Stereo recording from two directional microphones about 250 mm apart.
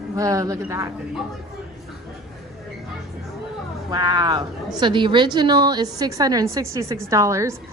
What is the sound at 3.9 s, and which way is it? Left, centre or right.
A woman's voice, centre.